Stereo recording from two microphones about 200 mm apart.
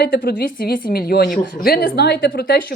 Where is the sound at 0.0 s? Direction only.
50° left (ahead or behind).